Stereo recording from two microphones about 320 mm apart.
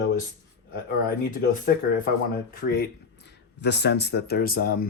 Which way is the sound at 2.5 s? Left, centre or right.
Left.